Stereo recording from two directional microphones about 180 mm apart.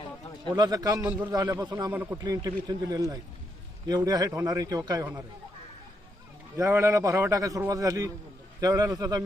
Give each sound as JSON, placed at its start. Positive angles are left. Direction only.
{"t": 0.5, "sound": "a man's voice", "side_deg": -20}
{"t": 1.0, "sound": "a man's voice", "side_deg": -10}
{"t": 1.4, "sound": "a man's voice", "side_deg": -20}
{"t": 1.9, "sound": "a man's voice", "side_deg": -10}
{"t": 6.6, "sound": "a man's voice", "side_deg": -15}